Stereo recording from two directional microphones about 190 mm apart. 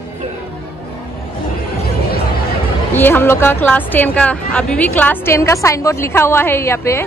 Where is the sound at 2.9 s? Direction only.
10° left (ahead or behind).